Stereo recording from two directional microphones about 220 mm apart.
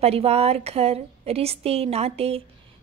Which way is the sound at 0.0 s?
30° right (ahead or behind).